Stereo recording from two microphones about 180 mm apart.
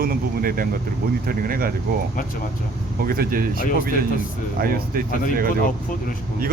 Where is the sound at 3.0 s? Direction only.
55° right (ahead or behind).